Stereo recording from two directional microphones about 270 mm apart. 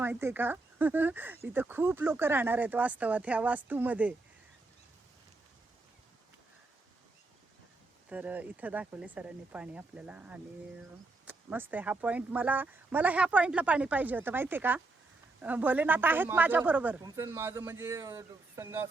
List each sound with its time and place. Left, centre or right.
0.0 s speech: centre
8.1 s speech: centre